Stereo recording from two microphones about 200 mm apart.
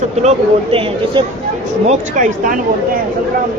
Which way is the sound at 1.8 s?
40° right (ahead or behind).